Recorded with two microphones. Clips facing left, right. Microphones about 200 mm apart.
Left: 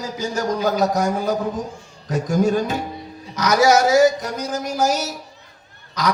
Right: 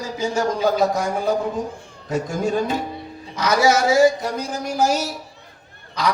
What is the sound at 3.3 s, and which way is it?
Speech, 25° right (ahead or behind).